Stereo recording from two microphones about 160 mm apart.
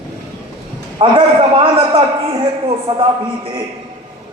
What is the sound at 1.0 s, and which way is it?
A man's voice, 35° right (ahead or behind).